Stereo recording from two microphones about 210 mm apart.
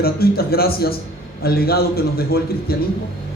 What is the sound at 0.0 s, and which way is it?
A man's voice, 45° left (ahead or behind).